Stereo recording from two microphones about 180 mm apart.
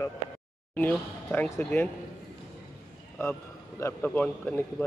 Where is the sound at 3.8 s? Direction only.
15° left (ahead or behind).